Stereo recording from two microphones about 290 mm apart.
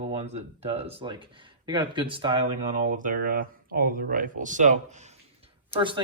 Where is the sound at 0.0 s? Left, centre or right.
Right.